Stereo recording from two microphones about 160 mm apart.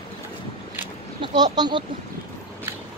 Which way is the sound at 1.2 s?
25° right (ahead or behind).